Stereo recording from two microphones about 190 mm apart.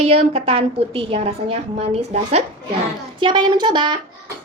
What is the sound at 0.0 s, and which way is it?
A woman's voice, 35° right (ahead or behind).